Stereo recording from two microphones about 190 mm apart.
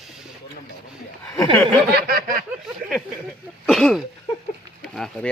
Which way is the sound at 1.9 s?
50° right (ahead or behind).